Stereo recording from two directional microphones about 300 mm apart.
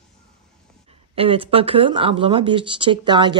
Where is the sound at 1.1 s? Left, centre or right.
Centre.